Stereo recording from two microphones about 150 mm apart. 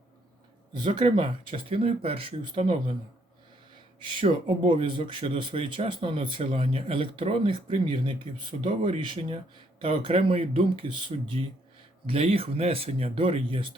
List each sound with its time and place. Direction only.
0.7 s speech: 35° right (ahead or behind)
4.0 s speech: 35° right (ahead or behind)